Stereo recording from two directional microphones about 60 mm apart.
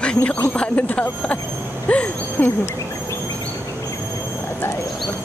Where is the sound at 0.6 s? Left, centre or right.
Left.